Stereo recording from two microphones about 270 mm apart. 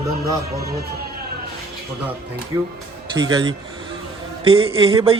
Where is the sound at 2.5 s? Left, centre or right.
Centre.